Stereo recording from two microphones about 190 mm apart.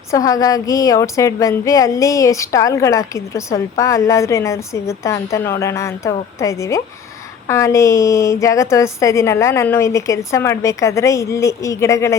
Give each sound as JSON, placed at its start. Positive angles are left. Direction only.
{"t": 0.1, "sound": "a woman's voice", "side_deg": 20}